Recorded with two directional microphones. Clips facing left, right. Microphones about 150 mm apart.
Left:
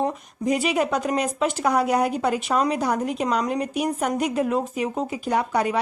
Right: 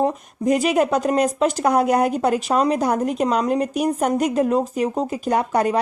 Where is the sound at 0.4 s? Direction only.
45° right (ahead or behind).